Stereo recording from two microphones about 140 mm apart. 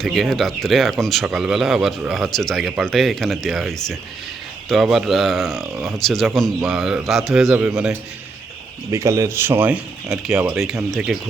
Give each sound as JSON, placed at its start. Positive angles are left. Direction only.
{"t": 0.0, "sound": "speech", "side_deg": 0}
{"t": 8.9, "sound": "speech", "side_deg": -20}